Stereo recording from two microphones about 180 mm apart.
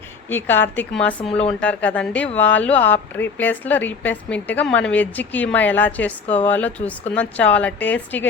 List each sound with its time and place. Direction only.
0.3 s speech: 10° left (ahead or behind)
1.3 s speech: 30° left (ahead or behind)
1.6 s speech: 10° left (ahead or behind)